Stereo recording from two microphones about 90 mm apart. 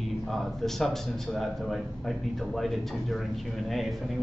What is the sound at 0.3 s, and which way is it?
A man's voice, 5° left (ahead or behind).